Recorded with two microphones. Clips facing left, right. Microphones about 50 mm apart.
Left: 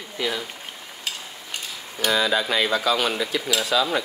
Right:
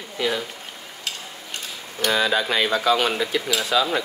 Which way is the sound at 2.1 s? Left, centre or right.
Right.